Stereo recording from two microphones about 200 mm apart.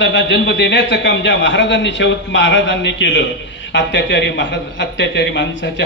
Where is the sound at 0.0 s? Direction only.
65° left (ahead or behind).